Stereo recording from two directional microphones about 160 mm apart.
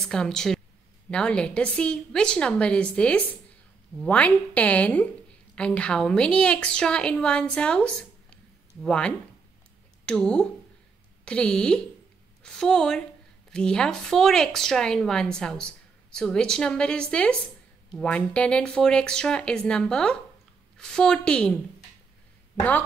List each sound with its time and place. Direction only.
0.0 s a woman's voice: 5° left (ahead or behind)